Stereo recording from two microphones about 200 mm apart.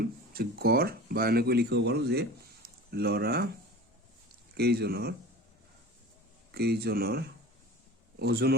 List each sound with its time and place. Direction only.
0.0 s speech: 50° right (ahead or behind)
4.5 s speech: 55° right (ahead or behind)
6.5 s speech: 55° right (ahead or behind)